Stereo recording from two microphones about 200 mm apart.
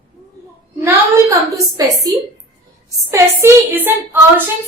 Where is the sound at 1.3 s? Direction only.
15° right (ahead or behind).